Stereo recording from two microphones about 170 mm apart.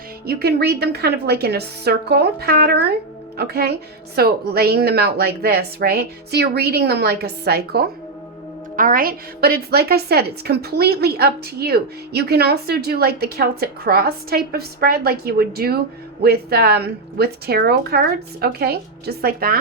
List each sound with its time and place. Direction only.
0.3 s a woman's voice: 70° right (ahead or behind)
8.7 s a woman's voice: 55° right (ahead or behind)